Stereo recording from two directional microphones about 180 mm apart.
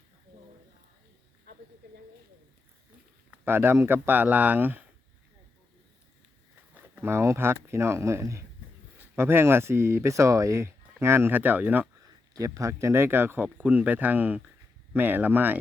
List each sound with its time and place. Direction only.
1.5 s a sound: 60° right (ahead or behind)
3.4 s speech: 10° right (ahead or behind)
6.7 s speech: 15° right (ahead or behind)